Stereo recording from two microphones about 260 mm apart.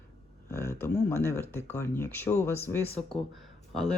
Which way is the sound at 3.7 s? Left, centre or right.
Centre.